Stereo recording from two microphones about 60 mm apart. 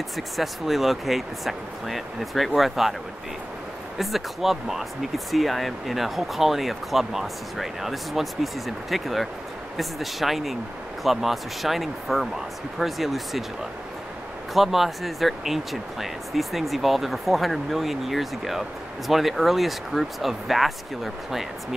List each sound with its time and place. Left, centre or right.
0.4 s speech: centre
4.0 s speech: centre
14.5 s speech: centre